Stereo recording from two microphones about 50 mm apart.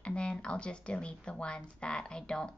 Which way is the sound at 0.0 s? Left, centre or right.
Centre.